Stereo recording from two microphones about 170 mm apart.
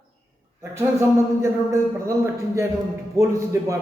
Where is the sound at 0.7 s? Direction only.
15° right (ahead or behind).